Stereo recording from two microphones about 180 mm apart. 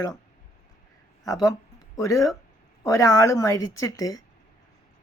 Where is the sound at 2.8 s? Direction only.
20° left (ahead or behind).